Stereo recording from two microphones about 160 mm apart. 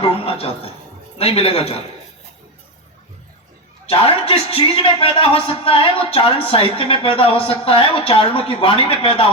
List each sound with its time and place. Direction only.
0.0 s a woman's voice: 35° left (ahead or behind)
3.8 s a man's voice: 35° left (ahead or behind)